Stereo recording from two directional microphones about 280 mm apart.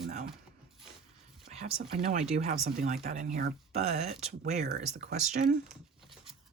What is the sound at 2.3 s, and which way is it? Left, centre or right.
Speech, right.